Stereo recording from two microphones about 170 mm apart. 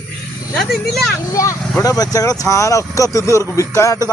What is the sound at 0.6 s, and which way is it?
Speech, centre (ahead or behind).